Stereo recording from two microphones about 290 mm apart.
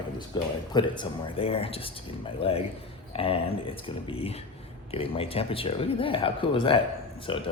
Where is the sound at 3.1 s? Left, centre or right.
Centre.